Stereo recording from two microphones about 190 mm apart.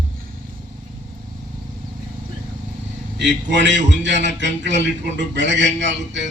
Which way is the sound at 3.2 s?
70° right (ahead or behind).